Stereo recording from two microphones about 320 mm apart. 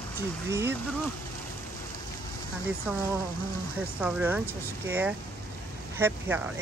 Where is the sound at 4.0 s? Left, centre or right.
Centre.